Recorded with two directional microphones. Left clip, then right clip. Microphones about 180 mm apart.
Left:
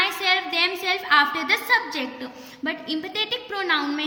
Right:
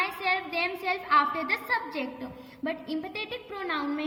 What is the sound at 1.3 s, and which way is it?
Speech, 45° left (ahead or behind).